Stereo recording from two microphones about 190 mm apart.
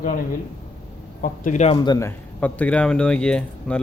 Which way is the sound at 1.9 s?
15° left (ahead or behind).